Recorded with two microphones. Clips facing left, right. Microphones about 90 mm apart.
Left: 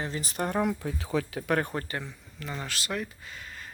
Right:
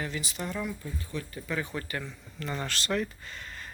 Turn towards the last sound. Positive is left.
turn(degrees=5)  # may be behind; listen again after turning